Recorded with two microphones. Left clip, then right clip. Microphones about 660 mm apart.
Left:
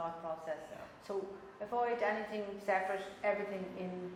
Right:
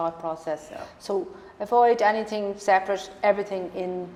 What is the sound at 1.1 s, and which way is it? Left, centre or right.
A woman's voice, right.